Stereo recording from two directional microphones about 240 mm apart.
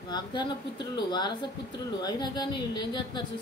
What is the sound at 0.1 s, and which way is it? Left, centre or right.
Speech, centre.